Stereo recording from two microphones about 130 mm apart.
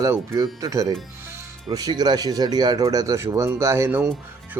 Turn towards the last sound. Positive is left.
turn(degrees=-15)  # may be behind; listen again after turning